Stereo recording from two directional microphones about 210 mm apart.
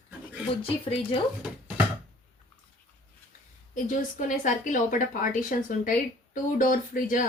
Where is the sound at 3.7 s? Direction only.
40° left (ahead or behind).